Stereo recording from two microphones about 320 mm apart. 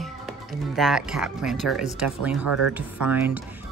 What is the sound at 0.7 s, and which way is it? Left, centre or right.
Speech, centre.